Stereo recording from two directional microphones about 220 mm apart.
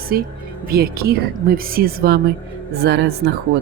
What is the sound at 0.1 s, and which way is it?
Speech, 45° right (ahead or behind).